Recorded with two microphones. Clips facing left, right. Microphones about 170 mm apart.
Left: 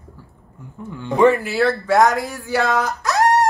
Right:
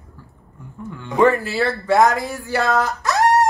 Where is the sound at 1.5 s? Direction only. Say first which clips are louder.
Left 1 dB; centre (ahead or behind).